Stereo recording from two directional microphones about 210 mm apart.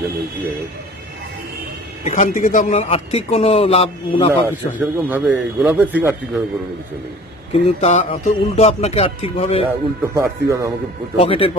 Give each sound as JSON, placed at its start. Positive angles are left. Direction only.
{"t": 2.0, "sound": "speech", "side_deg": 35}
{"t": 4.5, "sound": "a man's voice", "side_deg": -10}
{"t": 7.6, "sound": "speech", "side_deg": 30}
{"t": 9.7, "sound": "a man's voice", "side_deg": -15}
{"t": 11.1, "sound": "speech", "side_deg": 25}